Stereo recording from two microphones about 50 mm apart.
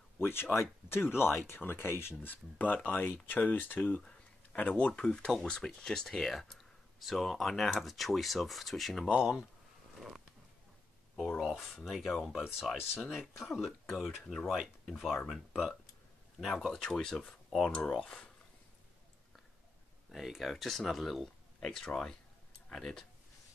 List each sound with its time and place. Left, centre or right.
0.2 s speech: left
2.2 s speech: left; by 9.2 s centre
9.2 s speech: centre
11.8 s speech: centre
18.0 s speech: centre
20.2 s speech: centre
21.6 s speech: centre